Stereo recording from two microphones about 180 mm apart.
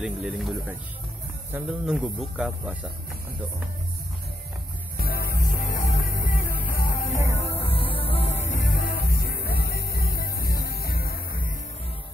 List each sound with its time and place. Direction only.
0.0 s speech: centre (ahead or behind)
1.9 s speech: centre (ahead or behind)
4.9 s music: 55° left (ahead or behind)
7.4 s music: 30° left (ahead or behind); by 11.5 s 55° left (ahead or behind)